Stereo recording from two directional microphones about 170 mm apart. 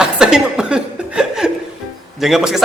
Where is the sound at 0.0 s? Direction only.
5° right (ahead or behind).